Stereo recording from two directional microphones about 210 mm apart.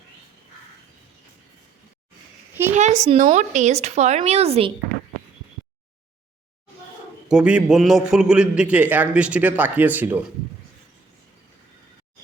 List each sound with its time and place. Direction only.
2.7 s a woman's voice: 35° right (ahead or behind)
7.3 s a man's voice: 5° right (ahead or behind)